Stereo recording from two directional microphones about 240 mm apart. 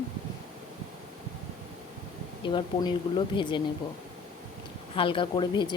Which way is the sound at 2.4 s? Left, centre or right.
Centre.